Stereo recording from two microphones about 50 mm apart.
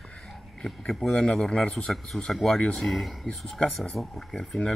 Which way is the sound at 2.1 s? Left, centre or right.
Left.